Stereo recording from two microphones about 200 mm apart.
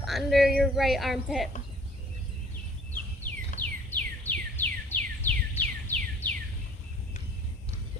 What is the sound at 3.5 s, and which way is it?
Bird, 40° left (ahead or behind).